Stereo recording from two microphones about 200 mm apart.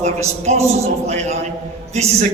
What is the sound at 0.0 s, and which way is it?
A man's voice, 30° right (ahead or behind).